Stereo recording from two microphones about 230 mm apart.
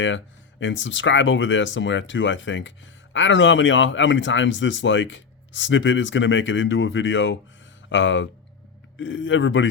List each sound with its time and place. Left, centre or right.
0.6 s speech: left